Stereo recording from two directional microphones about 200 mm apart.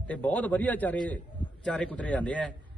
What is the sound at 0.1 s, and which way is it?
A man's voice, 5° left (ahead or behind).